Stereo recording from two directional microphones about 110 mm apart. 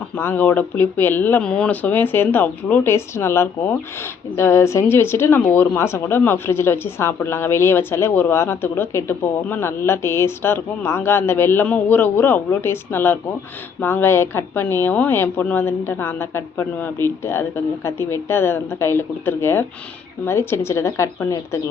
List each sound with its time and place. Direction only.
0.2 s speech: 15° left (ahead or behind)